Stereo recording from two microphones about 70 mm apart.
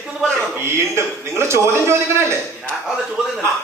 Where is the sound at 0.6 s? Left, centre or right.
Right.